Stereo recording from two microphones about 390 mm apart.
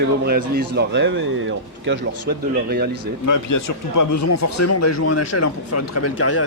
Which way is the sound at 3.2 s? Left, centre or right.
Left.